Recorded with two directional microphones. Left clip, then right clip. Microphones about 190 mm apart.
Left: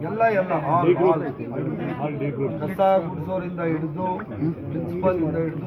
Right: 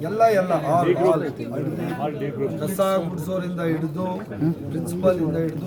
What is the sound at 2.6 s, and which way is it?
Speech, 20° right (ahead or behind).